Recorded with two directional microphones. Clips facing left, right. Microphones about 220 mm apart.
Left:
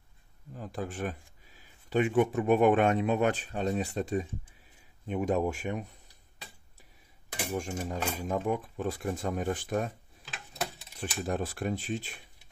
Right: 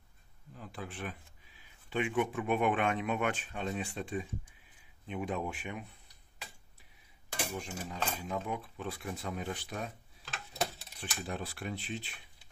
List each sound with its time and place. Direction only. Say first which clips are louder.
0.6 s speech: left 7 dB; 45° left (ahead or behind)
7.5 s speech: left 7 dB; 45° left (ahead or behind)
11.0 s speech: left 7 dB; 45° left (ahead or behind)